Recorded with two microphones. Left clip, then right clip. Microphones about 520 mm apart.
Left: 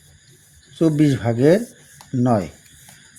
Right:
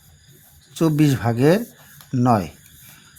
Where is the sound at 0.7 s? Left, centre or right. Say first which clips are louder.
Left 1 dB; right.